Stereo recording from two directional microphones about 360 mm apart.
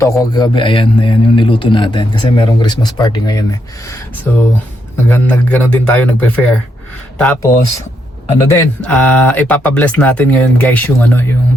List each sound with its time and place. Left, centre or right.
0.0 s a man's voice: centre
8.4 s speech: centre